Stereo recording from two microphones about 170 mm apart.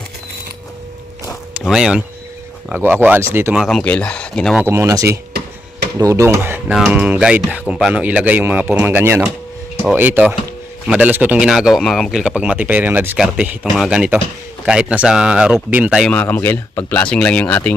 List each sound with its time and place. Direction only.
1.5 s speech: 5° right (ahead or behind)
4.6 s speech: 15° right (ahead or behind)
6.7 s speech: 5° right (ahead or behind)
16.1 s speech: 10° left (ahead or behind)